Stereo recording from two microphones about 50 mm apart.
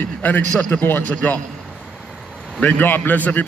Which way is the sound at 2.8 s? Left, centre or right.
Left.